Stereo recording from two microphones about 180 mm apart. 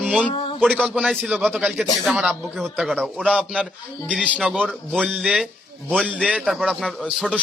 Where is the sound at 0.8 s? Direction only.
5° right (ahead or behind).